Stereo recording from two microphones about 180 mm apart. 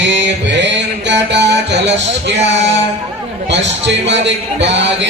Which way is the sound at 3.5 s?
80° right.